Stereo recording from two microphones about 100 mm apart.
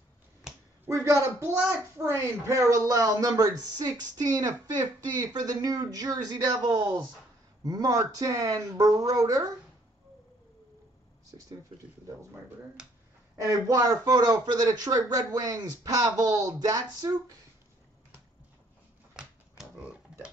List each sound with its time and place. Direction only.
0.8 s a woman's voice: 30° right (ahead or behind); by 7.1 s 50° right (ahead or behind)
7.6 s speech: 35° right (ahead or behind)
11.2 s speech: 35° right (ahead or behind)
13.4 s speech: 35° right (ahead or behind)
19.1 s a sound: 5° right (ahead or behind)